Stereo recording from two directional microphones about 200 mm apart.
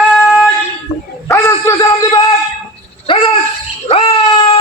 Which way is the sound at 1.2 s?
15° left (ahead or behind).